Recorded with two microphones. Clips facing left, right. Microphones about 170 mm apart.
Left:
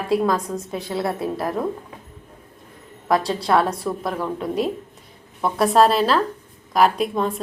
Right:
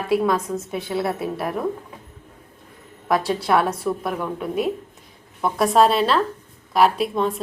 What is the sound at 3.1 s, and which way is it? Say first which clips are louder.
A woman's voice: left 1 dB; 5° right (ahead or behind).